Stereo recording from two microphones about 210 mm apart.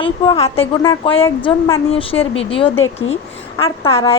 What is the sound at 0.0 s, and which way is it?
A woman's voice, 25° left (ahead or behind).